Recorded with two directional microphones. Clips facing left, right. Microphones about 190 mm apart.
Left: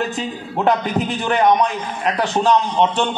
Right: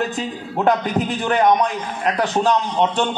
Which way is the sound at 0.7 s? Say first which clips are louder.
Even; 45° right (ahead or behind).